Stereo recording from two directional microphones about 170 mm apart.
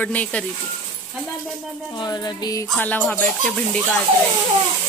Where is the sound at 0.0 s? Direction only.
10° left (ahead or behind).